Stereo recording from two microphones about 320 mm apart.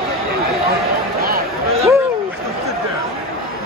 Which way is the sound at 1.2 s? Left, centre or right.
Right.